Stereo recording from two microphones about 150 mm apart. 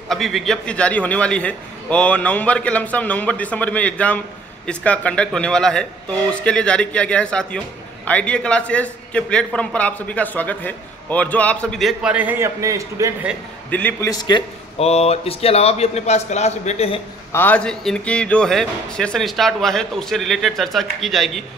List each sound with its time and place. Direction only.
0.1 s a man's voice: centre (ahead or behind); by 13.1 s 20° right (ahead or behind)
13.7 s a man's voice: 10° left (ahead or behind)
14.0 s a man's voice: 25° left (ahead or behind)
14.8 s a man's voice: 45° left (ahead or behind)
17.3 s a man's voice: 10° left (ahead or behind)